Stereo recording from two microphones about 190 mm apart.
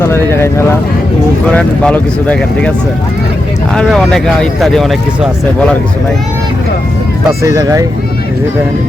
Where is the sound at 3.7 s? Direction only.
5° left (ahead or behind).